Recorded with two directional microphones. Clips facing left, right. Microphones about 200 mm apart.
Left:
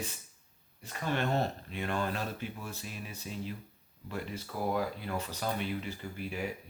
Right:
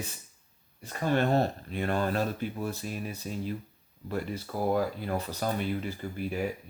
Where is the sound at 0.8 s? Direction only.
40° right (ahead or behind).